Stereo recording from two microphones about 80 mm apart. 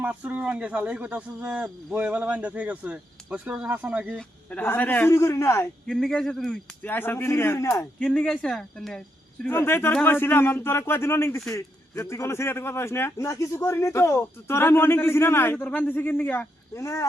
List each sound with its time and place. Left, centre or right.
0.0 s speech: centre
4.5 s a man's voice: left
5.0 s a man's voice: left
5.8 s speech: centre
6.8 s a man's voice: left
7.9 s speech: centre
9.5 s a man's voice: left
16.7 s a man's voice: left